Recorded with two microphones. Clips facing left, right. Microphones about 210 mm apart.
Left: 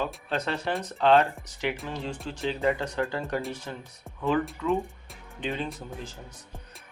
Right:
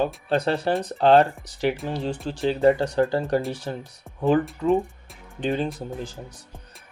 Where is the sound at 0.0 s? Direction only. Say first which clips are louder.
Right 7 dB; 35° right (ahead or behind).